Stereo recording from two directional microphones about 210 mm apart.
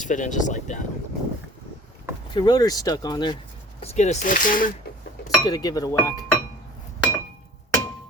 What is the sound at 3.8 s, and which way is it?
Speech, 30° left (ahead or behind).